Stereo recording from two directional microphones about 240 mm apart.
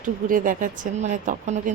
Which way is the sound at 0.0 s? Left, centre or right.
Right.